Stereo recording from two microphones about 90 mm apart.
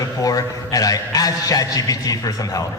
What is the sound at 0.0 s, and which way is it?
A man's voice, 40° left (ahead or behind).